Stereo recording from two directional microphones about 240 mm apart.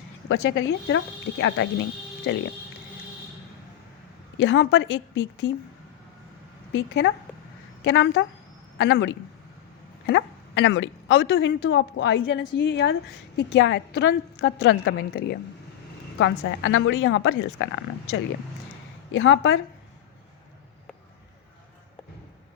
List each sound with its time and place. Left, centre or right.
0.3 s a woman's voice: left
4.4 s a woman's voice: left
6.7 s a woman's voice: left
19.1 s a woman's voice: left